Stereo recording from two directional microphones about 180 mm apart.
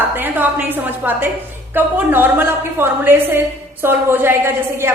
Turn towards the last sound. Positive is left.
turn(degrees=-15)  # may be behind; listen again after turning